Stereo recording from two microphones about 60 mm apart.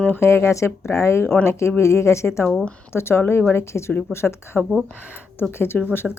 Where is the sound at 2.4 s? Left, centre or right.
Centre.